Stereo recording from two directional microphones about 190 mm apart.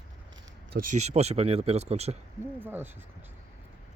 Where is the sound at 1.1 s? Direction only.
35° right (ahead or behind).